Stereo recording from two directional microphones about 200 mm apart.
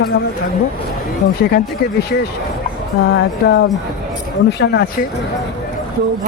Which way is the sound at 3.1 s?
65° left (ahead or behind).